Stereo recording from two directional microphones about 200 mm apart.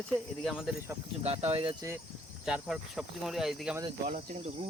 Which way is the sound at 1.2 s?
30° right (ahead or behind).